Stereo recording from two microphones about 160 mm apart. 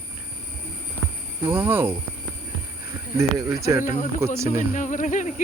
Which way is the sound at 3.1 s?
20° right (ahead or behind).